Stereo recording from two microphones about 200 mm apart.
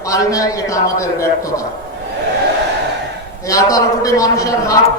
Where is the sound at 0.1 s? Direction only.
15° left (ahead or behind).